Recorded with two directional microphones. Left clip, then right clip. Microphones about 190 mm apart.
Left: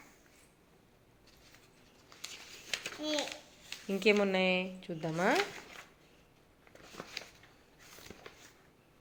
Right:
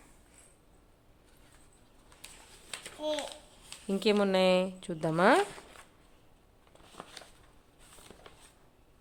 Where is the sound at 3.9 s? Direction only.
20° right (ahead or behind).